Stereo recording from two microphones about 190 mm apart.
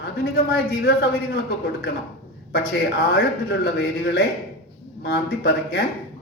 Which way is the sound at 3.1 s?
55° left (ahead or behind).